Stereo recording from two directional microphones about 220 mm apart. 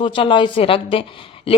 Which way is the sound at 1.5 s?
25° left (ahead or behind).